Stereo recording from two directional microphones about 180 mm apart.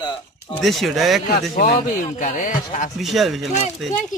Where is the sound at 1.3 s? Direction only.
55° left (ahead or behind).